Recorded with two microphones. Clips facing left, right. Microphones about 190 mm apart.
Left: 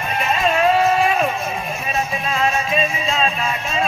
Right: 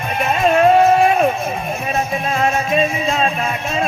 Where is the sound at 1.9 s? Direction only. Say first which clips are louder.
Right 3 dB; 50° right (ahead or behind).